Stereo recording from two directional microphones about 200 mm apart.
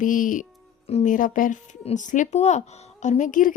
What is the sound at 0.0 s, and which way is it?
Speech, 40° left (ahead or behind).